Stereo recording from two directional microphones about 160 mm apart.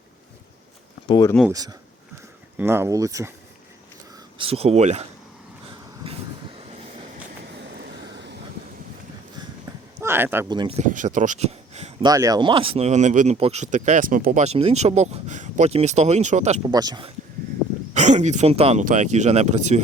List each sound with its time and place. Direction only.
1.0 s speech: 25° left (ahead or behind)
1.5 s speech: 20° right (ahead or behind)
4.4 s speech: 35° right (ahead or behind)
7.4 s vehicle: 90° right
10.0 s speech: 15° right (ahead or behind)
10.5 s speech: 30° right (ahead or behind)
10.8 s speech: 55° right (ahead or behind)
12.0 s speech: 20° right (ahead or behind); by 14.4 s 60° right (ahead or behind)
14.4 s speech: 40° right (ahead or behind)
16.6 s speech: 25° right (ahead or behind)
17.9 s speech: 50° right (ahead or behind)